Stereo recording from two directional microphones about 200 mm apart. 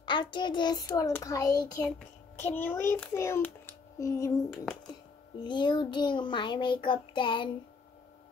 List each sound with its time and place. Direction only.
0.0 s child singing: 25° left (ahead or behind)
2.4 s a child's voice: 10° left (ahead or behind)
5.4 s child singing: 25° left (ahead or behind)